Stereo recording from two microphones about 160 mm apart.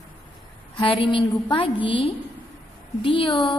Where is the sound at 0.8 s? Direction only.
30° left (ahead or behind).